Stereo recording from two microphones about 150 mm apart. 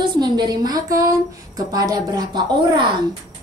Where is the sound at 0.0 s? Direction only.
30° right (ahead or behind).